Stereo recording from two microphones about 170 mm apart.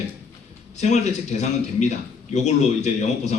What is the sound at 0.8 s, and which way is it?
A man's voice, 40° left (ahead or behind).